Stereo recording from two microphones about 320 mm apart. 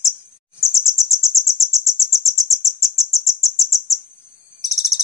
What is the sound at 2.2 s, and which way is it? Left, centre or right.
Cricket, centre.